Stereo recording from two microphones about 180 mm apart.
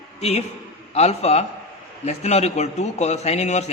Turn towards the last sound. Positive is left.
turn(degrees=40)  # may be behind; listen again after turning